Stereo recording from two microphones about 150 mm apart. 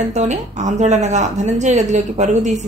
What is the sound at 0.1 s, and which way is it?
A woman's voice, 50° right (ahead or behind).